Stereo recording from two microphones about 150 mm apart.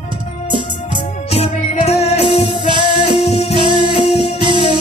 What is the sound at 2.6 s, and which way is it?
Music, 30° right (ahead or behind).